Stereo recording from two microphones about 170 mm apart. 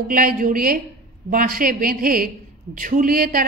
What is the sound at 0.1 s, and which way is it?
A woman's voice, 55° right (ahead or behind).